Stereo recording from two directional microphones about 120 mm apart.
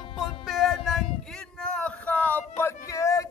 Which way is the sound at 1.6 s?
5° left (ahead or behind).